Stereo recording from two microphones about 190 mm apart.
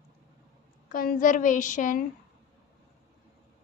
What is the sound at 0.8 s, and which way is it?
A woman's voice, 50° left (ahead or behind).